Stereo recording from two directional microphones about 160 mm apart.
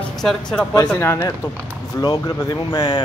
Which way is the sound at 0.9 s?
15° left (ahead or behind).